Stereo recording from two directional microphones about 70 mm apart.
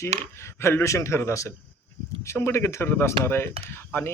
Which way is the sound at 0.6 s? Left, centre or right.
Left.